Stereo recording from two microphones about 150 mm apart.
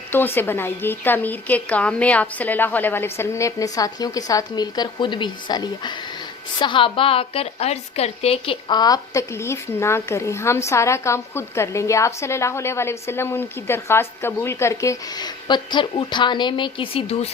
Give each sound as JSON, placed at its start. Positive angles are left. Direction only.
{"t": 0.1, "sound": "a woman's voice", "side_deg": 15}